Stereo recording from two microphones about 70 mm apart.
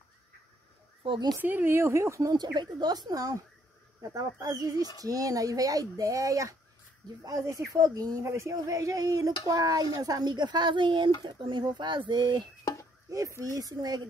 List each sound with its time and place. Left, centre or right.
1.4 s speech: right
2.3 s speech: right
8.2 s speech: right
13.1 s speech: right